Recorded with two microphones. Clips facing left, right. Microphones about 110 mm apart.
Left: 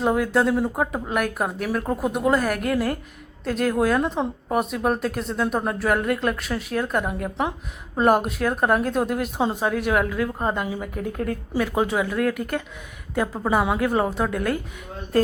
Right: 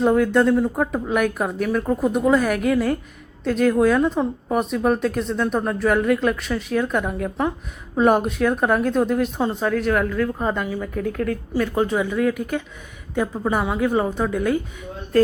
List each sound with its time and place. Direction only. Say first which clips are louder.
0.0 s speech: right 4 dB; 5° left (ahead or behind)
10.4 s speech: right 2 dB; 20° left (ahead or behind); by 14.6 s centre (ahead or behind)